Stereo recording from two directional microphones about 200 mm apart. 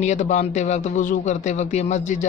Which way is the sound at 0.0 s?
35° left (ahead or behind).